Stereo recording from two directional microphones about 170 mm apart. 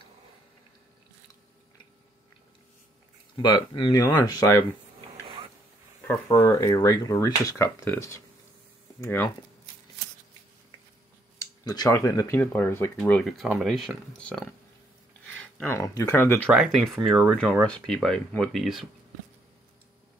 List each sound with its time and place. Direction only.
3.3 s speech: 30° left (ahead or behind)
4.0 s speech: 20° left (ahead or behind)
6.0 s speech: 15° left (ahead or behind)
11.6 s speech: 20° left (ahead or behind); by 14.5 s 5° left (ahead or behind)
15.6 s speech: 15° left (ahead or behind)
16.5 s speech: 5° right (ahead or behind)